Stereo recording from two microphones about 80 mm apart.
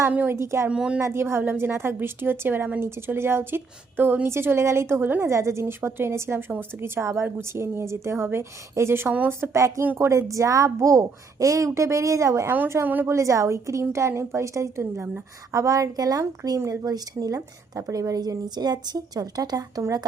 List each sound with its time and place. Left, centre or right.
0.1 s a woman's voice: right
0.3 s a woman's voice: right
0.7 s speech: centre
1.0 s a woman's voice: right
5.3 s a woman's voice: right
9.5 s a woman's voice: right
12.5 s a woman's voice: right
13.1 s a woman's voice: right
16.2 s a woman's voice: right
16.8 s a woman's voice: right